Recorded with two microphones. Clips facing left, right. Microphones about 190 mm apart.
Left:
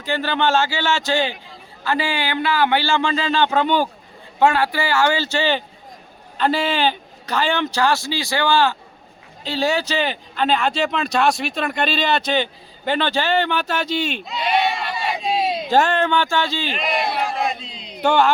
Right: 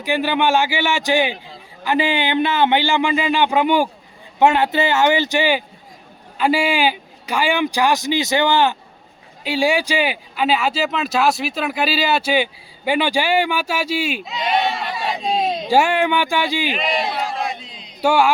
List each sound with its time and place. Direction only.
0.0 s speech: 15° right (ahead or behind); by 15.6 s 5° left (ahead or behind)
15.6 s speech: 10° right (ahead or behind)
18.0 s speech: 10° right (ahead or behind)